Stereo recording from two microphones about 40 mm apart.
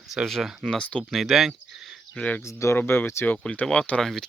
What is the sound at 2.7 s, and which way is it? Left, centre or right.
Speech, left.